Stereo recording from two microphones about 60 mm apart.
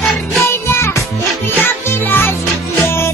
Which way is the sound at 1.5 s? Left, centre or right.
Left.